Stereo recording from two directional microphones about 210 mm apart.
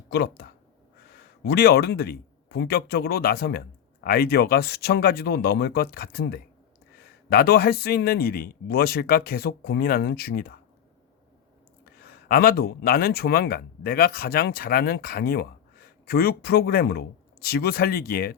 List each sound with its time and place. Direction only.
0.1 s speech: 50° left (ahead or behind)
11.9 s speech: 45° left (ahead or behind)